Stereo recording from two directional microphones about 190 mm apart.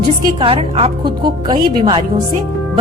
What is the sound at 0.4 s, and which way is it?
A woman's voice, 30° right (ahead or behind).